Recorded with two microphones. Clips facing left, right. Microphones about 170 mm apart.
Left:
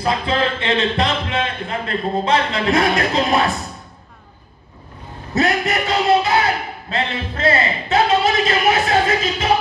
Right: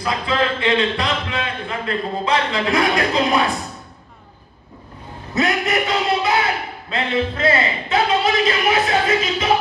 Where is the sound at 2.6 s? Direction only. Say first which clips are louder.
Left 1 dB; 45° left (ahead or behind).